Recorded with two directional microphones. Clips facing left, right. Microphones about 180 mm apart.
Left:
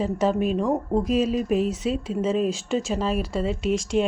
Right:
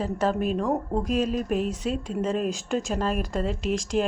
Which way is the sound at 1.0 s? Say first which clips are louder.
Left 3 dB; 45° right (ahead or behind).